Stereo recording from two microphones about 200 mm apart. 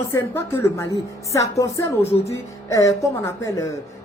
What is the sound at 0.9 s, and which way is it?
Speech, 15° right (ahead or behind).